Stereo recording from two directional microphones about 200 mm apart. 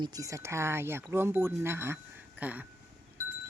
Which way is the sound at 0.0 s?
20° right (ahead or behind).